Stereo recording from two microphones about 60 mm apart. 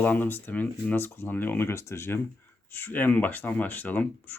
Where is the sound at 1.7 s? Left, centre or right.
Left.